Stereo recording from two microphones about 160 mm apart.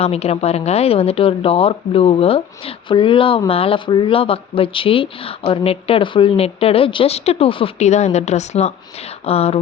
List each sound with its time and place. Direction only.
0.0 s speech: 40° left (ahead or behind)